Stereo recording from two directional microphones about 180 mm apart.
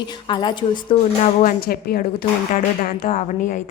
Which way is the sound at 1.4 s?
55° left (ahead or behind).